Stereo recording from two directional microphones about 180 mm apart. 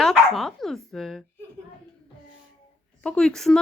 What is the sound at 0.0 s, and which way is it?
Dog, centre (ahead or behind).